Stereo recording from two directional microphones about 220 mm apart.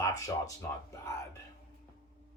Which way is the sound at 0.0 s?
15° left (ahead or behind).